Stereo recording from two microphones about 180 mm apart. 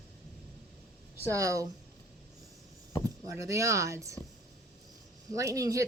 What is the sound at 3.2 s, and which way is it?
Speech, 15° right (ahead or behind).